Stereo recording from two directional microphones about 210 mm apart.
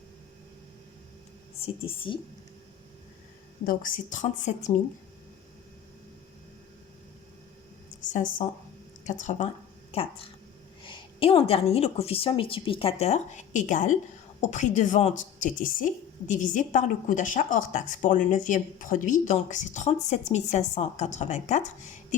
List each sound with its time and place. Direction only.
1.6 s a woman's voice: 25° left (ahead or behind)
3.7 s a woman's voice: 40° left (ahead or behind)
8.1 s a woman's voice: 40° left (ahead or behind)